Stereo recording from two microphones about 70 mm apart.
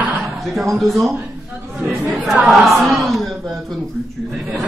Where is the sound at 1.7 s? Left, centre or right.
Centre.